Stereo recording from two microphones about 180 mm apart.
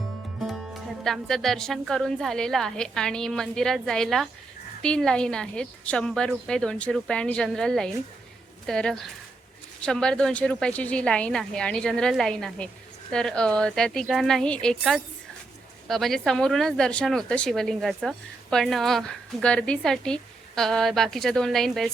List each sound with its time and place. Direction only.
0.4 s a woman's voice: centre (ahead or behind)